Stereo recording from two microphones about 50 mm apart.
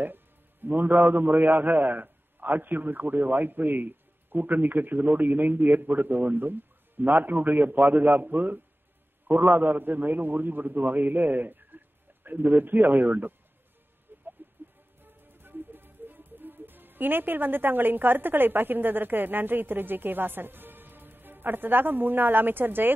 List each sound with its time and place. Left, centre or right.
0.0 s a man's voice: right
14.4 s music: right